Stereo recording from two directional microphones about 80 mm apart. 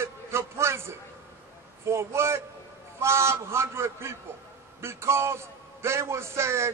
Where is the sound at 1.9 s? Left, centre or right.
Right.